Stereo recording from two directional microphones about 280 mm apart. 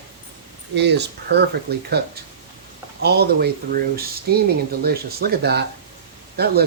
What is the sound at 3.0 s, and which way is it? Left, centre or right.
Speech, right.